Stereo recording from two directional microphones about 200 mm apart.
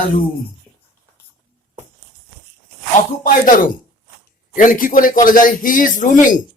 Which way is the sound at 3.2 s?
40° left (ahead or behind).